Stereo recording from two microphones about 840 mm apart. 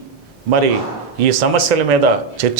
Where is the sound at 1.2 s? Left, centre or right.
Right.